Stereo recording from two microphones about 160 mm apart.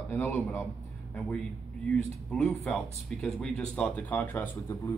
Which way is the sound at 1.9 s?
5° left (ahead or behind).